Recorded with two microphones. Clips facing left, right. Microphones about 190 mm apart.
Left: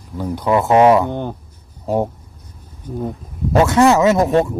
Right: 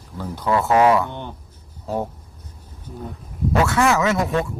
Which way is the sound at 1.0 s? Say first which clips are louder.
Left 9 dB; 40° left (ahead or behind).